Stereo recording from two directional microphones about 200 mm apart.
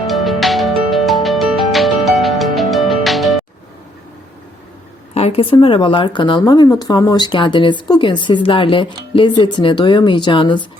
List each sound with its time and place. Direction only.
0.1 s music: centre (ahead or behind)
5.1 s speech: 30° left (ahead or behind)